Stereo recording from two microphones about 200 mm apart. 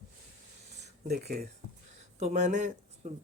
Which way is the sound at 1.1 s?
50° right (ahead or behind).